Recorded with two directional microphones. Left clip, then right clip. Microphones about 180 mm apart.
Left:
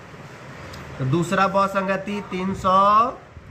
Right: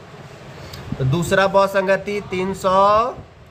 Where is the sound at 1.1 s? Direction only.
60° right (ahead or behind).